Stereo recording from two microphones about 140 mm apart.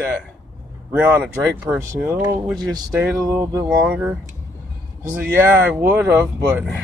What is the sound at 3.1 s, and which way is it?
Speech, 20° right (ahead or behind).